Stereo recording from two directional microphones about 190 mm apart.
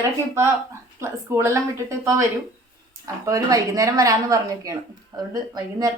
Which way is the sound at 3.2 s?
15° right (ahead or behind).